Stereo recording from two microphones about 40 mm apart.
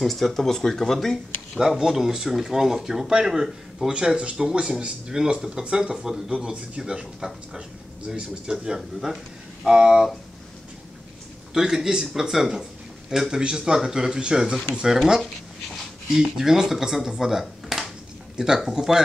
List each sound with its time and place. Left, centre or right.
0.0 s speech: centre
1.6 s speech: centre
4.2 s speech: right
6.0 s speech: centre
8.1 s speech: centre
11.7 s speech: centre
16.2 s speech: centre